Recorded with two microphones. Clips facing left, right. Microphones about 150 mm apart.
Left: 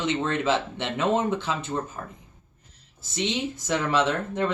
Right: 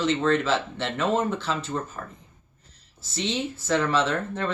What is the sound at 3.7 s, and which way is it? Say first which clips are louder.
Speech: right 1 dB; 15° left (ahead or behind).